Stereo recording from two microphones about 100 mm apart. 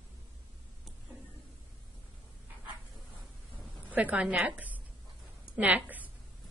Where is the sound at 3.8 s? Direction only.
15° right (ahead or behind).